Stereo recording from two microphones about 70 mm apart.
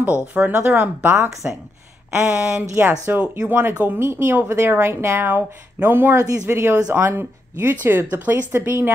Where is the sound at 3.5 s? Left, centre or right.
Right.